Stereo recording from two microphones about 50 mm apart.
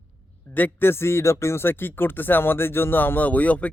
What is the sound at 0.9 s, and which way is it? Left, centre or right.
Speech, left.